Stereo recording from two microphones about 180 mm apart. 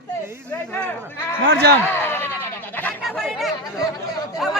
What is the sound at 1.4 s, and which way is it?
Speech, 70° right (ahead or behind).